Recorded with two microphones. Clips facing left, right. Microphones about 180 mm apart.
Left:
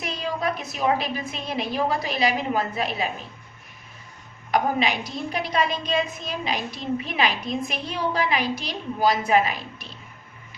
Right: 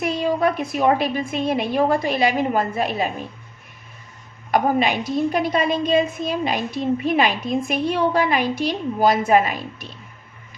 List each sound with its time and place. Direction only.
0.0 s a woman's voice: 50° right (ahead or behind)
4.5 s a woman's voice: 50° right (ahead or behind)